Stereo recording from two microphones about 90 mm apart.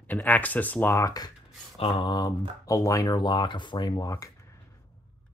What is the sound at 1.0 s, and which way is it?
Speech, 40° left (ahead or behind).